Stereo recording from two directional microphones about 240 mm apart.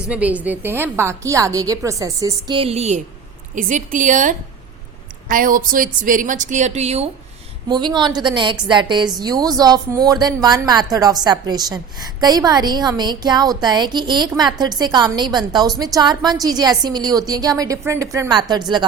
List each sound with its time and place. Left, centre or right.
0.1 s a woman's voice: centre